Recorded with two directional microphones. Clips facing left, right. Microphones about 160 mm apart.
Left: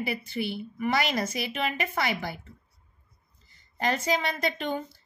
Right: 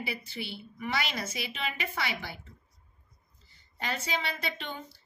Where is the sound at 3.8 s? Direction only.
45° left (ahead or behind).